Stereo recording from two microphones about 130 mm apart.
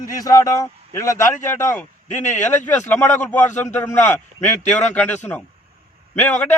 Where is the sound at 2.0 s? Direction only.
65° left (ahead or behind).